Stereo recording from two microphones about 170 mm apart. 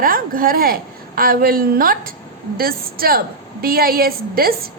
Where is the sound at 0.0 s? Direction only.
55° right (ahead or behind).